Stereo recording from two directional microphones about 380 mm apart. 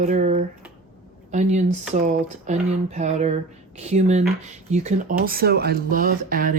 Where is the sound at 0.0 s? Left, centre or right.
Centre.